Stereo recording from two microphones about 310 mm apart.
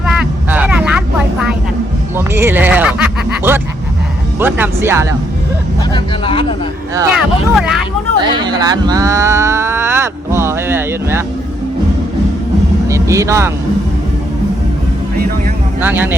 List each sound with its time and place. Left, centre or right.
0.0 s vehicle: centre
2.1 s a sound: centre
4.4 s speech: centre
5.9 s speech: centre
6.9 s speech: centre
12.9 s speech: centre
15.8 s speech: centre